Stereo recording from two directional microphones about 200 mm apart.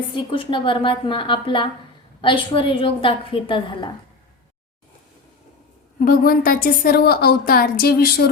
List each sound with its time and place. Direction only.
0.1 s a woman's voice: 25° left (ahead or behind)
6.1 s a woman's voice: 45° left (ahead or behind)